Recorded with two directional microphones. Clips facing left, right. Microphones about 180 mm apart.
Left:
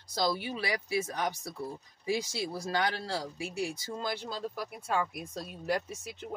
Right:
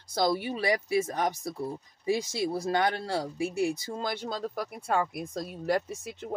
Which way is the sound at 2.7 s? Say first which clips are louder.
Right 3 dB; 50° right (ahead or behind).